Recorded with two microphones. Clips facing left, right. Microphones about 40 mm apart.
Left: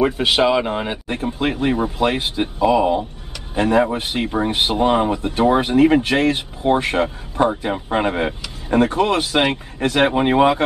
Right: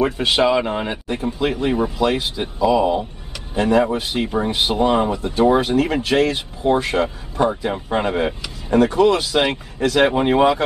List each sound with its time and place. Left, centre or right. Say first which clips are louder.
0.2 s speech: even; centre
1.4 s speech: even; left
3.5 s speech: even; left
7.4 s speech: even; left
10.1 s speech: even; centre